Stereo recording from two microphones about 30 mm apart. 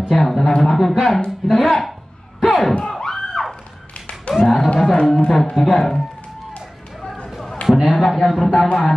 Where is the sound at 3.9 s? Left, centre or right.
Left.